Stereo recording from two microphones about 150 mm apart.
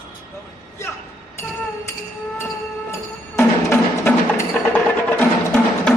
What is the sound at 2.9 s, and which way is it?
Music, 15° left (ahead or behind).